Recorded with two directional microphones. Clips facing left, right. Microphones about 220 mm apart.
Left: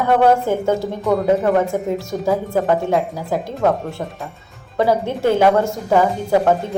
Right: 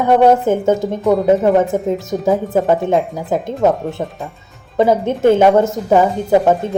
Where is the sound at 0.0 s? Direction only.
20° right (ahead or behind).